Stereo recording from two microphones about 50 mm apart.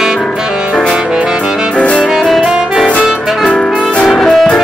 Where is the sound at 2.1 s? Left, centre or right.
Centre.